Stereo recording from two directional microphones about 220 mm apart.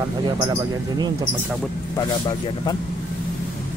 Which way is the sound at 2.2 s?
20° left (ahead or behind).